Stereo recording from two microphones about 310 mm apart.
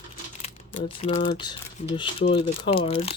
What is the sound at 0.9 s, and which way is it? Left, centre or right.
Speech, centre.